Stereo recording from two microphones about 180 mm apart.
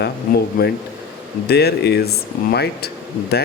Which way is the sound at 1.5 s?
65° left (ahead or behind).